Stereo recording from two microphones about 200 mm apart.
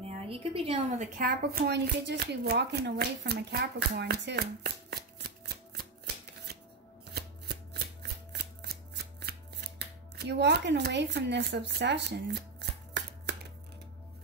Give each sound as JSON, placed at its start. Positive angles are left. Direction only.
{"t": 0.0, "sound": "speech", "side_deg": -30}
{"t": 8.0, "sound": "shuffling cards", "side_deg": -55}
{"t": 10.1, "sound": "speech", "side_deg": -55}